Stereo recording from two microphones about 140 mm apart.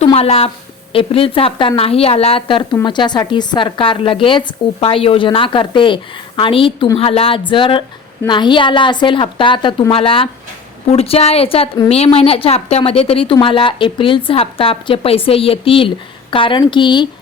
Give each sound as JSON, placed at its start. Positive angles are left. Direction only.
{"t": 0.0, "sound": "a woman's voice", "side_deg": 45}